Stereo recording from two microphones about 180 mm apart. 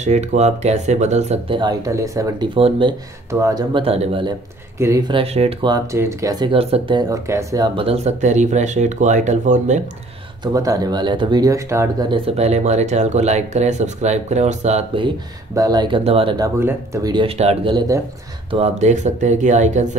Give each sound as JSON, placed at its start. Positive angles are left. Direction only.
{"t": 0.0, "sound": "speech", "side_deg": -40}
{"t": 1.6, "sound": "speech", "side_deg": -20}
{"t": 3.3, "sound": "speech", "side_deg": -15}
{"t": 4.7, "sound": "speech", "side_deg": -20}
{"t": 6.5, "sound": "speech", "side_deg": -30}
{"t": 10.4, "sound": "speech", "side_deg": -20}
{"t": 12.4, "sound": "speech", "side_deg": -35}
{"t": 16.4, "sound": "speech", "side_deg": -15}
{"t": 17.4, "sound": "speech", "side_deg": -35}
{"t": 17.7, "sound": "speech", "side_deg": -20}
{"t": 18.5, "sound": "speech", "side_deg": -35}